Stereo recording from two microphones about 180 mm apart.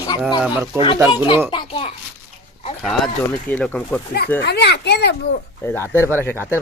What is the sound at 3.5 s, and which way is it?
Speech, 10° left (ahead or behind).